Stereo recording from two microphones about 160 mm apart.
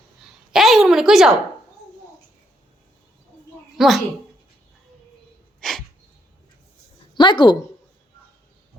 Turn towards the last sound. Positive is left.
turn(degrees=30)  # may be behind; listen again after turning